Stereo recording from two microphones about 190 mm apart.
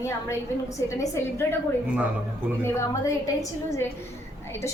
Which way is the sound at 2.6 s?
15° left (ahead or behind).